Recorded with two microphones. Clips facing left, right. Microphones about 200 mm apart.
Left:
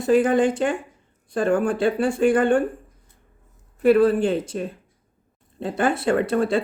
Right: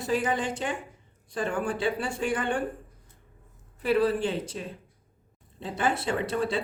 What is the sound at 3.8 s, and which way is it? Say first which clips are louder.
Speech: left 8 dB; 50° left (ahead or behind).